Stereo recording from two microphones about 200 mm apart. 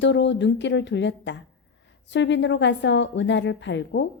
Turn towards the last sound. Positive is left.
turn(degrees=60)  # may be behind; listen again after turning